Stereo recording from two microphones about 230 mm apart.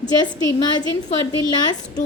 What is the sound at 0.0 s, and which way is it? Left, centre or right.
Speech, centre.